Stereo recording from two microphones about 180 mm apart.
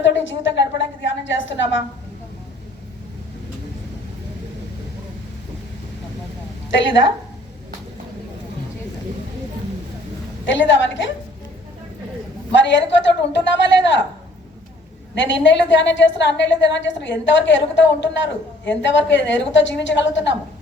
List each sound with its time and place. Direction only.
0.0 s a woman's voice: 90° left
6.7 s a woman's voice: 90° left
10.4 s a woman's voice: 90° left
12.5 s a woman's voice: 80° left
15.1 s a woman's voice: 90° left